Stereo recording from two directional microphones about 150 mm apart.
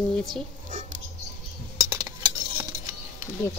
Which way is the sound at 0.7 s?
60° right (ahead or behind).